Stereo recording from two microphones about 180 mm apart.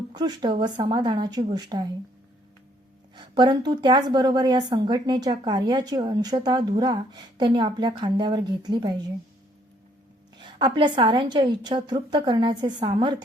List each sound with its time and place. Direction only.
0.1 s a woman's voice: 25° right (ahead or behind)
3.2 s a woman's voice: 25° right (ahead or behind)
10.3 s a woman's voice: 25° right (ahead or behind)